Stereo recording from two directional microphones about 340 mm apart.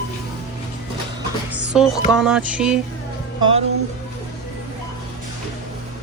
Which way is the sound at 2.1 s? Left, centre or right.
Centre.